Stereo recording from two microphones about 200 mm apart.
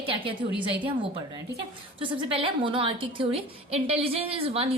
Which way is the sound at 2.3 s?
25° right (ahead or behind).